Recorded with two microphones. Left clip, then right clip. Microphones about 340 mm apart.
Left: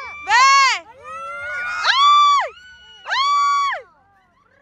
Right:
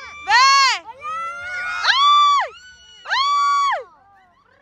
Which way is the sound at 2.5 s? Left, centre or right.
Centre.